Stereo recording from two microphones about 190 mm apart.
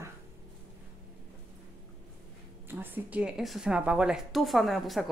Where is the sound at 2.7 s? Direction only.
10° right (ahead or behind).